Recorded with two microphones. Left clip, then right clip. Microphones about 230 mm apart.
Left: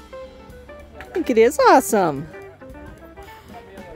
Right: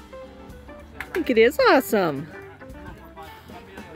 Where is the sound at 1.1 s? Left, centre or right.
Centre.